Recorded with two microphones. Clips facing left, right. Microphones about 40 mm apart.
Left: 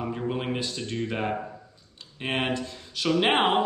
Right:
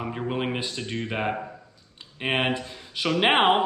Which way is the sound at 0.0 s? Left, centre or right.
Centre.